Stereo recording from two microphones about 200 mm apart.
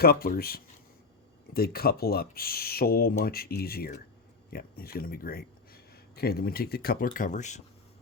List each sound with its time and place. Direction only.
0.0 s speech: 50° left (ahead or behind)